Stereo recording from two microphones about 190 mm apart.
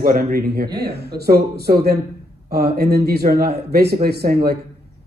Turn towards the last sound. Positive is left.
turn(degrees=-55)  # may be behind; listen again after turning